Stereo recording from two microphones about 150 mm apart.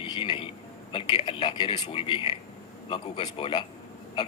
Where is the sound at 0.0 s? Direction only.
35° left (ahead or behind).